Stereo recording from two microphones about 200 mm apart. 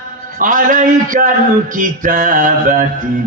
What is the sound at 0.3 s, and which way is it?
A man's voice, 40° right (ahead or behind).